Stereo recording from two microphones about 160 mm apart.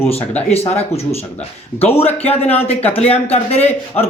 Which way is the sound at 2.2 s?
40° left (ahead or behind).